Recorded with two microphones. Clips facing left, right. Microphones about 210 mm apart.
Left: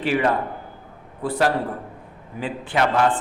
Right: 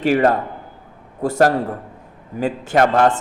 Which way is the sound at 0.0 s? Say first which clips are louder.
Right 5 dB; 45° right (ahead or behind).